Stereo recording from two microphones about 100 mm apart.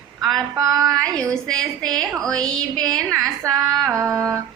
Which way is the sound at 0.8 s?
5° left (ahead or behind).